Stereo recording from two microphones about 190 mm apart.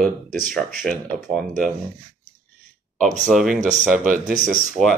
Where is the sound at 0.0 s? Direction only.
Centre (ahead or behind).